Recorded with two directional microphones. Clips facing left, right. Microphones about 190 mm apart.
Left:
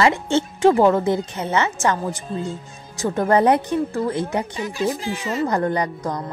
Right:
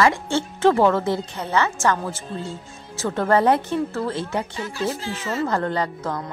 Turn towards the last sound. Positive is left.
turn(degrees=15)  # may be behind; listen again after turning